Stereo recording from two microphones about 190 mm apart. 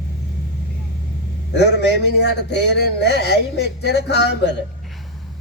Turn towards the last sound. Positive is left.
turn(degrees=60)  # may be behind; listen again after turning